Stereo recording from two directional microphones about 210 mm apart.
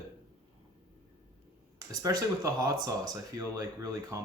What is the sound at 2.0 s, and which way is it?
Speech, 15° right (ahead or behind).